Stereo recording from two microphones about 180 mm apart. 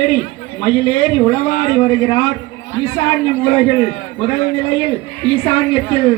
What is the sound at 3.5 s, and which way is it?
A man's voice, 30° left (ahead or behind).